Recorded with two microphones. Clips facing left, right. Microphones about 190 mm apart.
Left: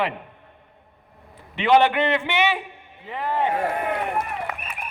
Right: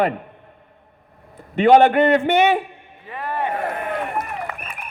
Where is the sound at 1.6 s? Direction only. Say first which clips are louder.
Right 5 dB; 45° right (ahead or behind).